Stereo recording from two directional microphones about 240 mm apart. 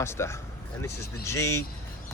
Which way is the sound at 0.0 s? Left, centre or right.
Centre.